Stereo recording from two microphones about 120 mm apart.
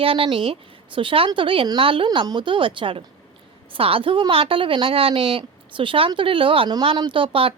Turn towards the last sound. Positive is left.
turn(degrees=-50)  # may be behind; listen again after turning